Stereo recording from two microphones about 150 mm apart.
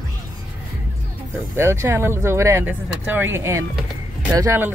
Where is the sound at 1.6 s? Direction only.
15° right (ahead or behind).